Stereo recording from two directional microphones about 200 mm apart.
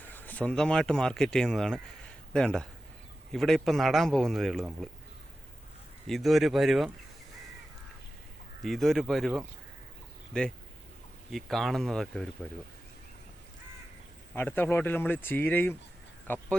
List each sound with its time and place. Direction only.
0.0 s a man's voice: 10° left (ahead or behind)
6.1 s a man's voice: centre (ahead or behind)
8.6 s a man's voice: centre (ahead or behind)
14.3 s speech: 10° left (ahead or behind)
16.2 s a sound: 10° left (ahead or behind)